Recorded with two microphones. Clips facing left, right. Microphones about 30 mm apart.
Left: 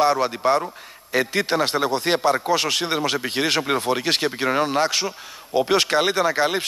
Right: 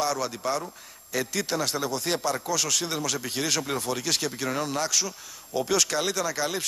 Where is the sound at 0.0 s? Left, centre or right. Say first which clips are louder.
Left 9 dB; left.